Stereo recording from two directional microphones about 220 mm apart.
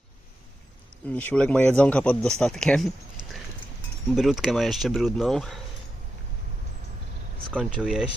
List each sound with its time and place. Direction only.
1.0 s speech: 5° left (ahead or behind)
7.5 s speech: centre (ahead or behind)